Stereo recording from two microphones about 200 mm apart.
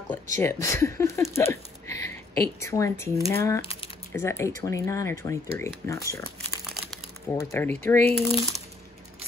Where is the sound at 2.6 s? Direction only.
15° left (ahead or behind).